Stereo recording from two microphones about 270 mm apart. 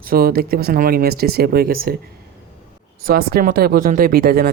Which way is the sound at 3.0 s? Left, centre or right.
Right.